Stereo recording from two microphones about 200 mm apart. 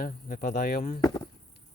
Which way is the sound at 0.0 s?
45° left (ahead or behind).